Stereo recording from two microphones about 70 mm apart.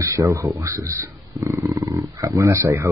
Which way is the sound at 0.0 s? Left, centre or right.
Right.